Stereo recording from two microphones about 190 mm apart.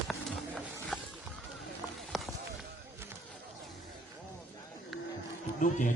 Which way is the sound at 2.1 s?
Centre (ahead or behind).